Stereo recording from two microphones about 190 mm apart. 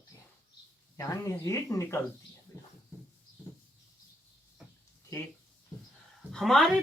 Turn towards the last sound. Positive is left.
turn(degrees=0)  # may be behind; listen again after turning